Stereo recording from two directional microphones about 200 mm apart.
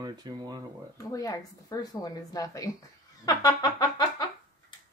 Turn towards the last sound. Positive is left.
turn(degrees=20)  # may be behind; listen again after turning